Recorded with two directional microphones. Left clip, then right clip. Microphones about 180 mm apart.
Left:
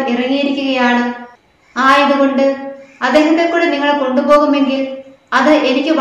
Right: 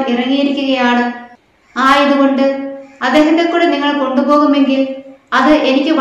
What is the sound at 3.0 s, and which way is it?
A woman's voice, 5° right (ahead or behind).